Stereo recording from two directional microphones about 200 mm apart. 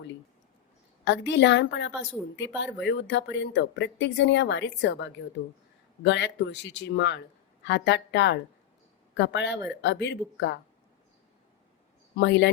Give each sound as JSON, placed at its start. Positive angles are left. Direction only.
{"t": 1.0, "sound": "speech", "side_deg": 60}
{"t": 12.1, "sound": "speech", "side_deg": 60}